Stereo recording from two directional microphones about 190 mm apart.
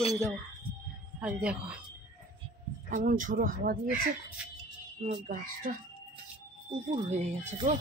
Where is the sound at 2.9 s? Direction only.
45° right (ahead or behind).